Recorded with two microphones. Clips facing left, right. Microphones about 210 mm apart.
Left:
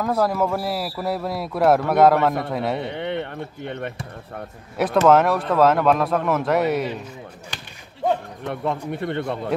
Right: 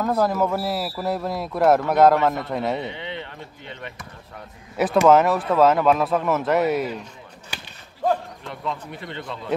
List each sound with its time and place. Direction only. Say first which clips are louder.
0.0 s speech: even; centre (ahead or behind)
2.8 s speech: left 5 dB; 55° left (ahead or behind)
4.7 s speech: even; 5° right (ahead or behind)
8.5 s speech: left 6 dB; 60° left (ahead or behind)